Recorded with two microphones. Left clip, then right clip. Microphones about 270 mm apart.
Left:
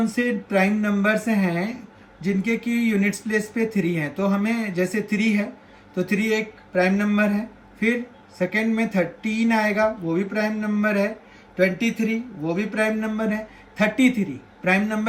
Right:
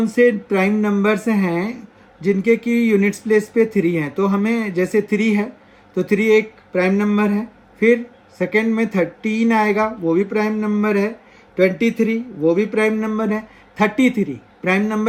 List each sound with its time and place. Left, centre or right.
0.0 s speech: centre